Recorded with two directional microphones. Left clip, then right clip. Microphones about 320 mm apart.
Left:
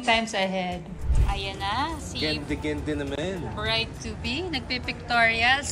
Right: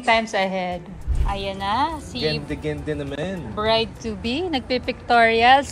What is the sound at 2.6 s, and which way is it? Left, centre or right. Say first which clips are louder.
Speech: right 2 dB; right.